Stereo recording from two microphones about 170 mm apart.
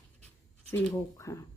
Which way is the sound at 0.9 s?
20° left (ahead or behind).